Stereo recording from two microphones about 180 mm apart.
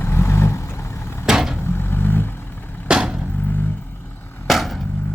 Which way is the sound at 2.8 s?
5° right (ahead or behind).